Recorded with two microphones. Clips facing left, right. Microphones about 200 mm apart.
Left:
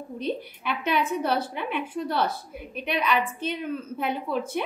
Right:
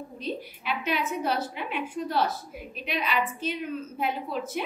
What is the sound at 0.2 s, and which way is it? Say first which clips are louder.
A woman's voice: left 4 dB; 55° left (ahead or behind).